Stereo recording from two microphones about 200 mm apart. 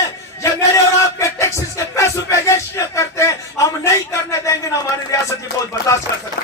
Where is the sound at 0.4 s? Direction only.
15° left (ahead or behind).